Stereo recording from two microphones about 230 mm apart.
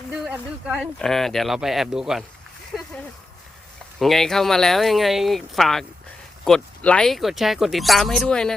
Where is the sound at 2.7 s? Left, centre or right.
Centre.